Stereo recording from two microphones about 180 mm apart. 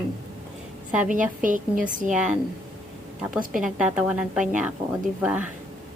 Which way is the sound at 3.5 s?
5° right (ahead or behind).